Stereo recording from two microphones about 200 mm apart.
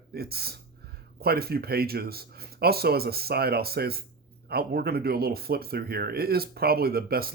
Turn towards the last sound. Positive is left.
turn(degrees=-50)  # may be behind; listen again after turning